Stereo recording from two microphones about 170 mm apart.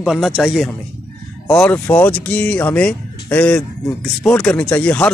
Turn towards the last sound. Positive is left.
turn(degrees=10)  # may be behind; listen again after turning